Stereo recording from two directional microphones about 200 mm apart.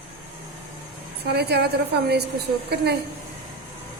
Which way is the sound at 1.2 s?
55° right (ahead or behind).